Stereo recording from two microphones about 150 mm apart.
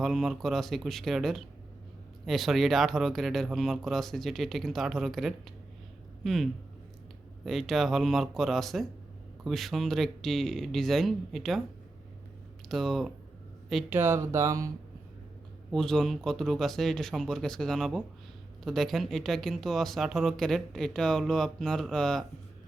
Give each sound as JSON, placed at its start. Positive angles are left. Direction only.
{"t": 0.0, "sound": "speech", "side_deg": 0}
{"t": 12.6, "sound": "speech", "side_deg": 0}
{"t": 13.9, "sound": "speech", "side_deg": -15}
{"t": 15.7, "sound": "speech", "side_deg": 5}